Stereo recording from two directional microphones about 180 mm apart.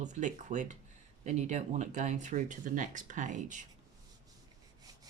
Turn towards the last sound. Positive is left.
turn(degrees=-45)  # may be behind; listen again after turning